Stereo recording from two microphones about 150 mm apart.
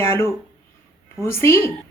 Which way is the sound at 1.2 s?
15° left (ahead or behind).